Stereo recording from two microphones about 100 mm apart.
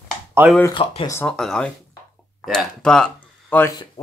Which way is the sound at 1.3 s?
5° left (ahead or behind).